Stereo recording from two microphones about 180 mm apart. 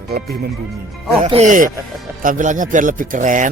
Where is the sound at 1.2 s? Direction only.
35° right (ahead or behind).